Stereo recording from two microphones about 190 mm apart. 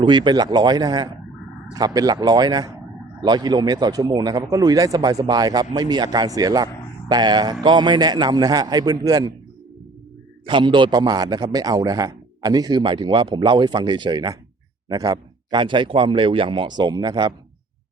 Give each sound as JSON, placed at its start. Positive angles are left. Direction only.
{"t": 0.0, "sound": "a man's voice", "side_deg": -25}
{"t": 10.4, "sound": "a man's voice", "side_deg": -25}